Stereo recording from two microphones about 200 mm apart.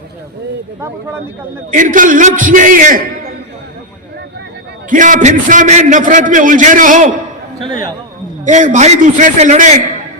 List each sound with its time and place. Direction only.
1.7 s a man's voice: 40° right (ahead or behind)
4.9 s a man's voice: 40° right (ahead or behind)
7.6 s speech: 20° right (ahead or behind)
8.4 s a man's voice: 40° right (ahead or behind)